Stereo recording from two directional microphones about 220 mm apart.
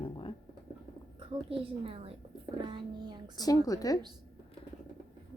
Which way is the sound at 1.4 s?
25° right (ahead or behind).